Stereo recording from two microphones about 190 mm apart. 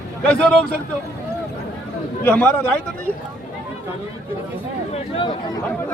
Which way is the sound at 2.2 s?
5° left (ahead or behind).